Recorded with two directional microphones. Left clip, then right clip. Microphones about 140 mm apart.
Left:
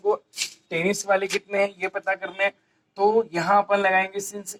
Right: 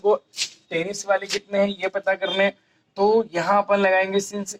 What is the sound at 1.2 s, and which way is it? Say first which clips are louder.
Speech: right 1 dB; 15° right (ahead or behind).